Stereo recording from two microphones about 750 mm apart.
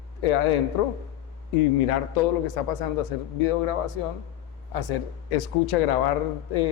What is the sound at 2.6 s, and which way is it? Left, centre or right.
A man's voice, left.